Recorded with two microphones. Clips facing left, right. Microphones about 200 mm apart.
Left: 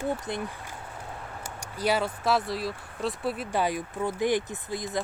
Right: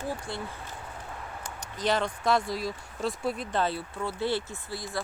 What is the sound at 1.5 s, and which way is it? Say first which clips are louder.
Speech: left 1 dB; 10° left (ahead or behind).